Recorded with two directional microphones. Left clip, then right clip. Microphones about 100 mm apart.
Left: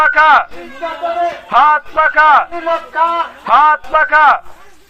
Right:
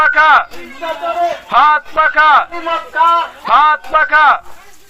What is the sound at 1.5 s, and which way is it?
Speech, 10° left (ahead or behind).